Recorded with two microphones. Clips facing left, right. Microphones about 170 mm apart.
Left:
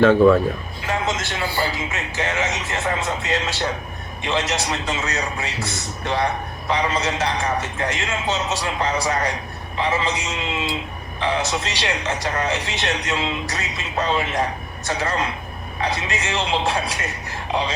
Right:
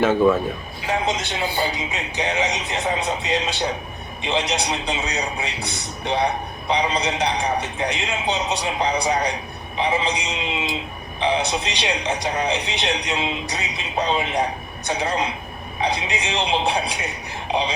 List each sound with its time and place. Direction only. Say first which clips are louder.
0.0 s speech: left 4 dB; 15° right (ahead or behind)